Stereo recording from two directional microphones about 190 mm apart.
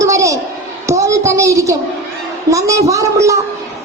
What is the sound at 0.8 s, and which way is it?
A woman's voice, 15° right (ahead or behind).